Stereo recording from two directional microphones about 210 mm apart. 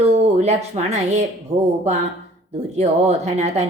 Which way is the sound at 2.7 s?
30° right (ahead or behind).